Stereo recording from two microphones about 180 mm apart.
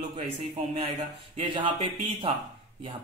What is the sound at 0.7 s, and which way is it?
A man's voice, 35° right (ahead or behind).